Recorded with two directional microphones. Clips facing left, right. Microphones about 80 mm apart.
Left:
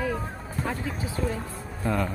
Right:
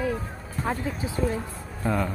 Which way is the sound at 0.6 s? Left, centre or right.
Centre.